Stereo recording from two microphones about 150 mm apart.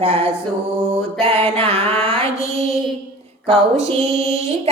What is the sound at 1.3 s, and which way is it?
Music, 15° left (ahead or behind).